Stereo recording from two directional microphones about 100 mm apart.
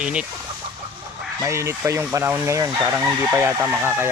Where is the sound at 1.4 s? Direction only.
30° right (ahead or behind).